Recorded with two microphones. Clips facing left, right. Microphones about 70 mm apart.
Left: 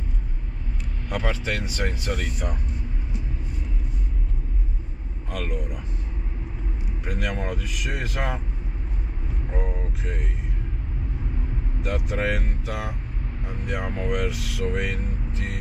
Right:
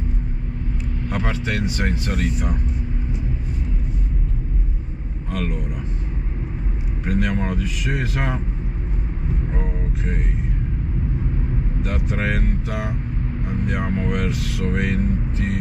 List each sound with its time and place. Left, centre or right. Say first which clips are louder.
1.0 s speech: right 2 dB; right
5.3 s speech: right 4 dB; right
7.1 s speech: right 6 dB; right
9.5 s vehicle: right 3 dB; right
11.9 s speech: even; right